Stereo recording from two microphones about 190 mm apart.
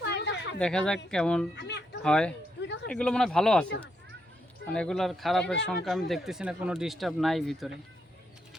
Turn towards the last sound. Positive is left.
turn(degrees=0)  # may be behind; listen again after turning